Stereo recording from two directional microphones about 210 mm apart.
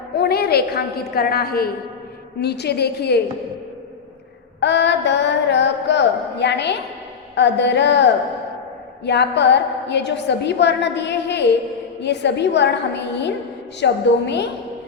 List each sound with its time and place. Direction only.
0.2 s a woman's voice: 50° left (ahead or behind)
4.6 s a woman's voice: 55° left (ahead or behind)
9.0 s a woman's voice: 55° left (ahead or behind)